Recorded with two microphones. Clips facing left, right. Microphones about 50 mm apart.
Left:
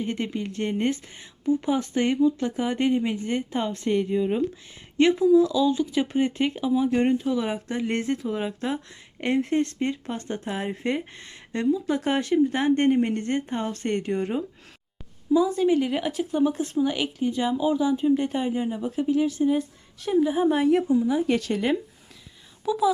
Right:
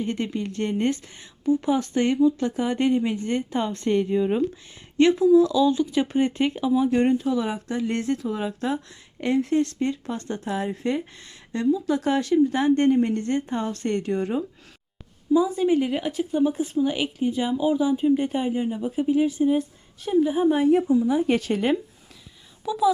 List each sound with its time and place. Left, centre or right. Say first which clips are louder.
0.0 s speech: right 1 dB; centre
4.2 s speech: right 2 dB; centre
4.9 s speech: right 2 dB; centre
7.4 s speech: right 1 dB; left
9.2 s a woman's voice: right 1 dB; left
15.4 s speech: even; centre
18.9 s speech: right 2 dB; centre
21.2 s speech: right 2 dB; right
22.6 s speech: even; centre